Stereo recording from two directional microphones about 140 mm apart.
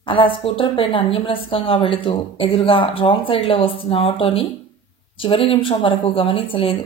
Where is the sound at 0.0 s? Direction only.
40° left (ahead or behind).